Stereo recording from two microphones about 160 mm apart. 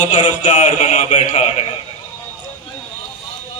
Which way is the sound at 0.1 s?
55° left (ahead or behind).